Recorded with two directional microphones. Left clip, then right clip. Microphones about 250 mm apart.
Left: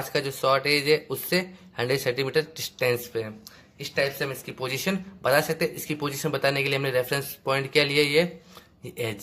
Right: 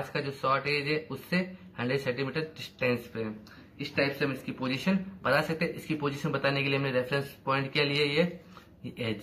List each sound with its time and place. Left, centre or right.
0.1 s speech: left